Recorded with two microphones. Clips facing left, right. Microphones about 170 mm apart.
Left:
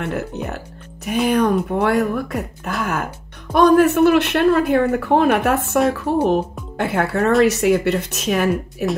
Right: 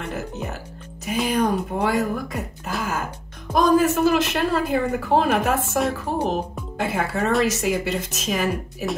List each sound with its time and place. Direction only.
0.0 s speech: 65° left (ahead or behind)
5.8 s a woman's voice: centre (ahead or behind)
6.8 s speech: 60° left (ahead or behind)